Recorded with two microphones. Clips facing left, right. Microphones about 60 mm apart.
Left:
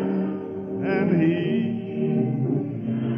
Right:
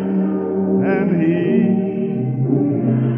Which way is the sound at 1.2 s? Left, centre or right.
Right.